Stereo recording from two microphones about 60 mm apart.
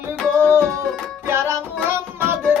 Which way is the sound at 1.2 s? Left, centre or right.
Right.